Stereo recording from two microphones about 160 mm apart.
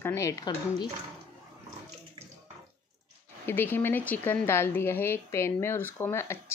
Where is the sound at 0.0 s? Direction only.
20° left (ahead or behind).